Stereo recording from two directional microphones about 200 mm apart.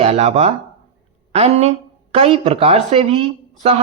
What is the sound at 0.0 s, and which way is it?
Speech, 30° right (ahead or behind).